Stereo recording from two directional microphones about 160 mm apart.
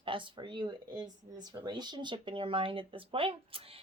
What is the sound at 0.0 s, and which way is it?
Speech, 30° right (ahead or behind).